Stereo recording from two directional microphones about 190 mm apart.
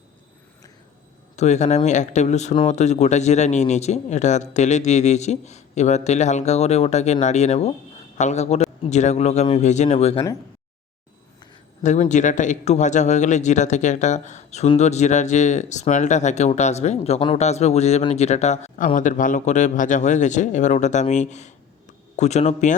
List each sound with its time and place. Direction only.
1.4 s a man's voice: 40° left (ahead or behind)
11.8 s a man's voice: 40° left (ahead or behind)